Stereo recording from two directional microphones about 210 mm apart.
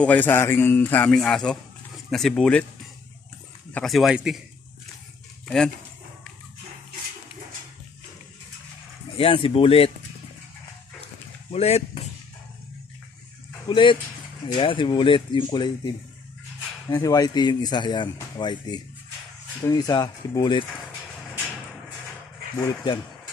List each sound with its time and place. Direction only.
0.0 s a man's voice: 10° left (ahead or behind)
3.7 s speech: centre (ahead or behind)
9.1 s speech: 25° left (ahead or behind)
11.5 s speech: 30° left (ahead or behind)
13.7 s speech: 25° left (ahead or behind)
16.9 s speech: 15° left (ahead or behind)